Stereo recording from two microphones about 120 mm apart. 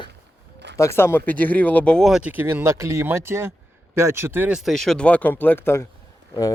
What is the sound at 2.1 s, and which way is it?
Speech, 10° right (ahead or behind).